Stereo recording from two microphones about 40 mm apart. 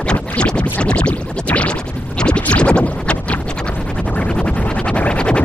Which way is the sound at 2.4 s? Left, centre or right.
Left.